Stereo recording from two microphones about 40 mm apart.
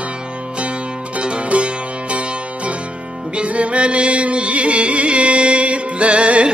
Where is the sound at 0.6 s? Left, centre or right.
Right.